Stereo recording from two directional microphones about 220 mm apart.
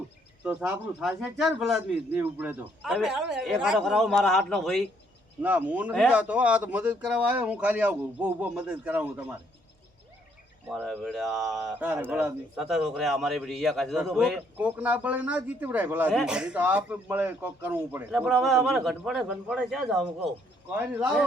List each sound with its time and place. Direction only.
0.4 s a man's voice: 5° right (ahead or behind)
10.7 s a man's voice: centre (ahead or behind)